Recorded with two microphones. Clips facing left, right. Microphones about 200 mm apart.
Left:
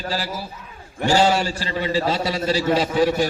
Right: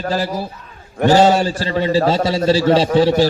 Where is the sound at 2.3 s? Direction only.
25° right (ahead or behind).